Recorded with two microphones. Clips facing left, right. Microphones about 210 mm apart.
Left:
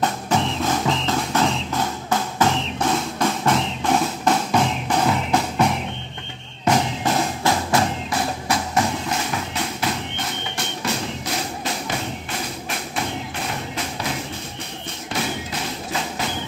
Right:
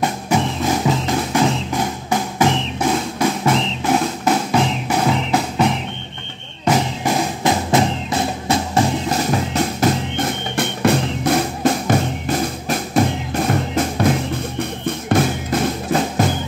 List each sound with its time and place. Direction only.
0.0 s music: 10° right (ahead or behind)
6.7 s music: 10° right (ahead or behind)
9.1 s music: 40° right (ahead or behind)